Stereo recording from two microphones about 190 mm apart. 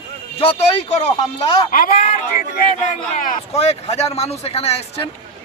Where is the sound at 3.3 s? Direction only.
35° left (ahead or behind).